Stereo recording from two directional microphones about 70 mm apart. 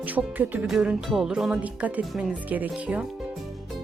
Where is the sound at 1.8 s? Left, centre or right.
Right.